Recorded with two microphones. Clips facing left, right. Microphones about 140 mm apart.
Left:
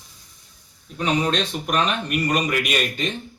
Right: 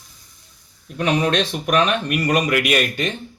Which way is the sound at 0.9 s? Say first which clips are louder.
Right 3 dB; 65° right (ahead or behind).